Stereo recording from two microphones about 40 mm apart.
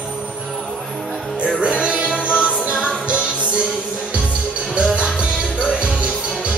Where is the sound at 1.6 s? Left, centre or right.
Right.